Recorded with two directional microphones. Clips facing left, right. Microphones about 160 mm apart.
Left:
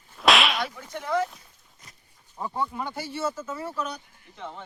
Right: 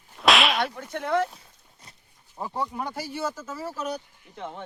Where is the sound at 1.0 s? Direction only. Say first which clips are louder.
Right 2 dB; 60° right (ahead or behind).